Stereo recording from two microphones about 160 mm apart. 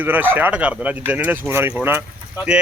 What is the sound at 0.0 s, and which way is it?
Speech, 10° right (ahead or behind).